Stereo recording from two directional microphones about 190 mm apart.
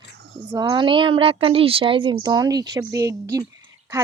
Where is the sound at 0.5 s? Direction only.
25° right (ahead or behind).